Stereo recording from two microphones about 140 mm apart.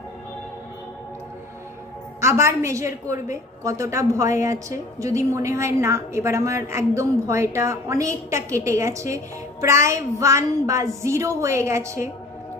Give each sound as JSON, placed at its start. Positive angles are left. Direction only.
{"t": 2.1, "sound": "a woman's voice", "side_deg": -20}